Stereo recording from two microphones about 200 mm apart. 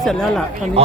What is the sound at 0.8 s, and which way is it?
Speech, 30° right (ahead or behind).